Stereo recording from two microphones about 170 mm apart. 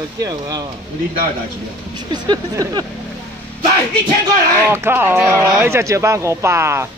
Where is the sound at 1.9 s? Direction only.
25° right (ahead or behind).